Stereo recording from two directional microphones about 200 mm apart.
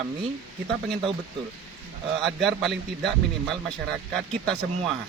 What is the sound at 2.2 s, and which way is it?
Speech, centre (ahead or behind).